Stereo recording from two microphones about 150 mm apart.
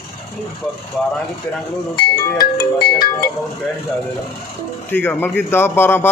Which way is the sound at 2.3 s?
30° left (ahead or behind).